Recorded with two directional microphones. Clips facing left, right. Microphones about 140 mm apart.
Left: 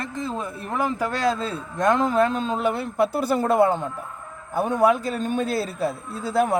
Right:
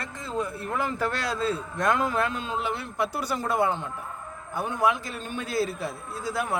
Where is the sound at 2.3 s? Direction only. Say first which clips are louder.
Left 6 dB; 40° left (ahead or behind).